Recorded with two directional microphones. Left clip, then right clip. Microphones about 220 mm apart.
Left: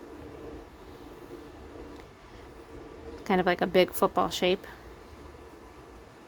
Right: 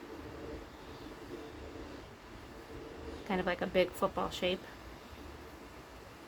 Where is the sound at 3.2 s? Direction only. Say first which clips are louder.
Left 9 dB; 55° left (ahead or behind).